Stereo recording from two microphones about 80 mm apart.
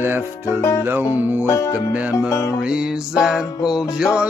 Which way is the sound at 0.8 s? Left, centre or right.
Right.